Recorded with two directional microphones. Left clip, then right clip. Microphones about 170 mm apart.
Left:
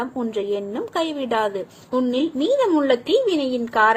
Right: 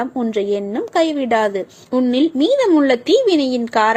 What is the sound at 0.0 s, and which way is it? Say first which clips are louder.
A woman's voice: right 5 dB; 40° right (ahead or behind).